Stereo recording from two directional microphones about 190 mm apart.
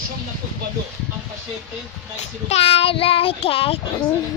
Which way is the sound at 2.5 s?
30° left (ahead or behind).